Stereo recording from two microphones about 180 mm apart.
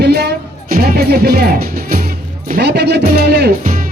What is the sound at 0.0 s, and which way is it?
Music, 65° right (ahead or behind).